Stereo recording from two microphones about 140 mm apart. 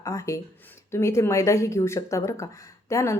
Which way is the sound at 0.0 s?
20° left (ahead or behind).